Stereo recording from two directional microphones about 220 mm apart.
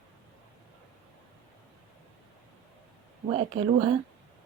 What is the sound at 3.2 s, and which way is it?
Speech, 25° right (ahead or behind).